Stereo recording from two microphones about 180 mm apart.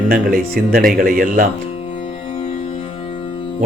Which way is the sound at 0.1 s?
55° right (ahead or behind).